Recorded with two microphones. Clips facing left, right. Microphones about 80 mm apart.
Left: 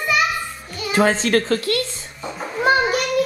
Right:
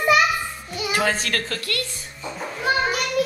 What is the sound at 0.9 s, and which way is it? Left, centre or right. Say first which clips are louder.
Speech: left 7 dB; left.